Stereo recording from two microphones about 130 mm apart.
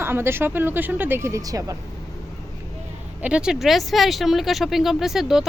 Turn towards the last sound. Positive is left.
turn(degrees=0)  # may be behind; listen again after turning